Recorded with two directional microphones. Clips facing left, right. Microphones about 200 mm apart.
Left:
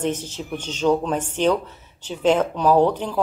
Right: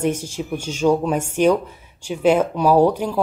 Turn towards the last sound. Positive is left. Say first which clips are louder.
# right 2 dB
turn(degrees=-10)  # may be behind; listen again after turning